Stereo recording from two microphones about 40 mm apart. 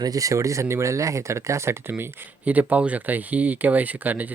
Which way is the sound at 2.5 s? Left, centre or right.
Right.